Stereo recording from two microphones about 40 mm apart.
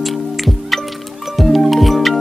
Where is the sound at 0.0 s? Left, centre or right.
Centre.